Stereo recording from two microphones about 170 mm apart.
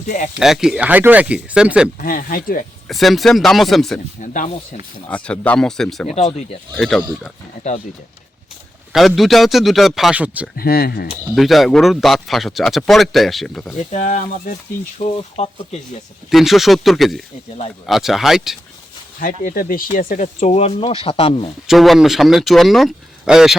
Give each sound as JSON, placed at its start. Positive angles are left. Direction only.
{"t": 0.3, "sound": "speech", "side_deg": 0}
{"t": 2.0, "sound": "speech", "side_deg": 55}
{"t": 2.9, "sound": "speech", "side_deg": 0}
{"t": 4.2, "sound": "speech", "side_deg": 45}
{"t": 5.0, "sound": "speech", "side_deg": 5}
{"t": 8.9, "sound": "speech", "side_deg": 0}
{"t": 10.6, "sound": "speech", "side_deg": 65}
{"t": 11.3, "sound": "speech", "side_deg": 0}
{"t": 13.9, "sound": "speech", "side_deg": 45}
{"t": 16.3, "sound": "speech", "side_deg": 0}
{"t": 19.2, "sound": "speech", "side_deg": 55}
{"t": 21.7, "sound": "speech", "side_deg": 0}